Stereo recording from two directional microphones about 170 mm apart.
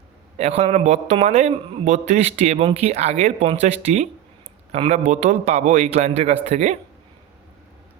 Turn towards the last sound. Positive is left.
turn(degrees=-40)  # may be behind; listen again after turning